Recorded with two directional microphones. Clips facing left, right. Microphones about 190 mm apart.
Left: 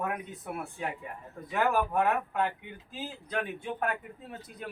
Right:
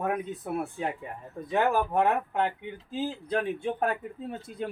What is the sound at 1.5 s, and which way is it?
Speech, 25° right (ahead or behind).